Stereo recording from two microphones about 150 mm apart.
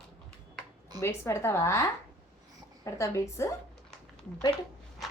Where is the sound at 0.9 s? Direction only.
15° left (ahead or behind).